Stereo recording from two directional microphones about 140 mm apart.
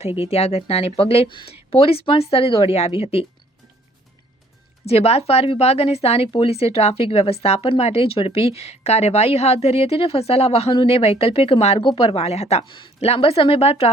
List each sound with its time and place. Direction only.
0.0 s speech: 45° left (ahead or behind)
4.9 s speech: 45° left (ahead or behind)